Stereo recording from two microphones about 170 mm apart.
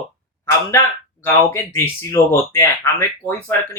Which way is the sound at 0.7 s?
15° left (ahead or behind).